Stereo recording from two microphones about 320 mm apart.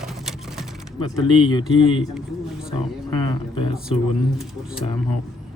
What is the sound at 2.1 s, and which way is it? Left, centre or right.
Speech, centre.